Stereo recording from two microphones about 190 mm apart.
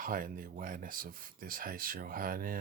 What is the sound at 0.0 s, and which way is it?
Speech, 45° right (ahead or behind).